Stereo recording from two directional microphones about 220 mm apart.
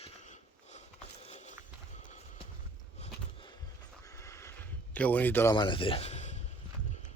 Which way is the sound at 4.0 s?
15° left (ahead or behind).